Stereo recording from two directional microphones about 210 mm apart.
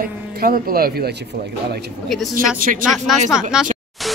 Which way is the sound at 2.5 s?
40° right (ahead or behind).